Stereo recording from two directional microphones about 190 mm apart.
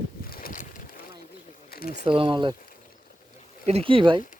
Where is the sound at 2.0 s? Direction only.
25° right (ahead or behind).